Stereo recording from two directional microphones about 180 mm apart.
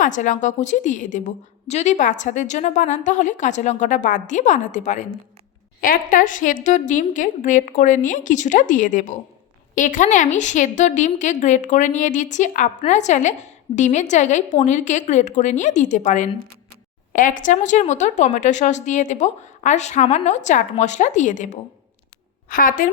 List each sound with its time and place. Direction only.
0.0 s a woman's voice: 45° left (ahead or behind)